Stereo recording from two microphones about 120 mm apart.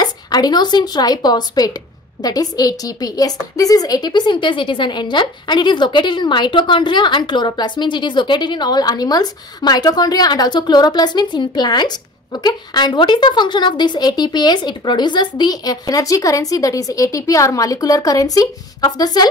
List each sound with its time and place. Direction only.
0.0 s a woman's voice: 35° left (ahead or behind)